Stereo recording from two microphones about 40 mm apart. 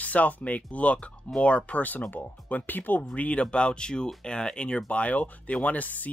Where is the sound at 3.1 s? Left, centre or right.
Left.